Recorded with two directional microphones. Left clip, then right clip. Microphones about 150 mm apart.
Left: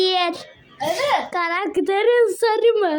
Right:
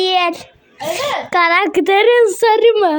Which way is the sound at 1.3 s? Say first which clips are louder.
Right 9 dB; 30° right (ahead or behind).